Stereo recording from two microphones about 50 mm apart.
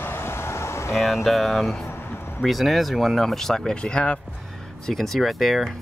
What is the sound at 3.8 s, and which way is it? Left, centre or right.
Speech, left.